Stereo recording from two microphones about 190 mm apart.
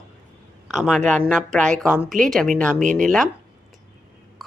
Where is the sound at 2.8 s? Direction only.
40° right (ahead or behind).